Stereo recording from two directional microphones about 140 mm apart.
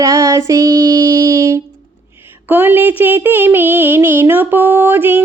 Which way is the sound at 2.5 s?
15° right (ahead or behind).